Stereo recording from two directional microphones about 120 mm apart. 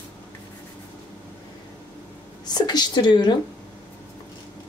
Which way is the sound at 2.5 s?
35° left (ahead or behind).